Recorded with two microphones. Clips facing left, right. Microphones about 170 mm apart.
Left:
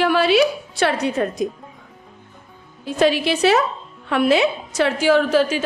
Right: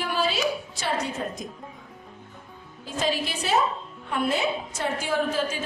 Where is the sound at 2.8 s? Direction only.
70° left (ahead or behind).